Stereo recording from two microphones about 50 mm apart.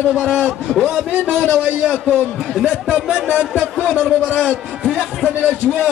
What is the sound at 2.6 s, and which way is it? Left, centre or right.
A man's voice, centre.